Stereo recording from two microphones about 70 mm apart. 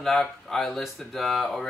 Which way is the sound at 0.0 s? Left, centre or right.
Centre.